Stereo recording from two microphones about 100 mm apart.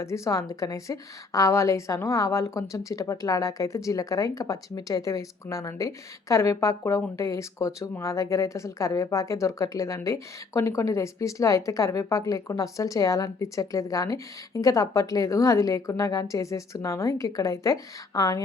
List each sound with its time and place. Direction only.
0.0 s speech: 30° left (ahead or behind)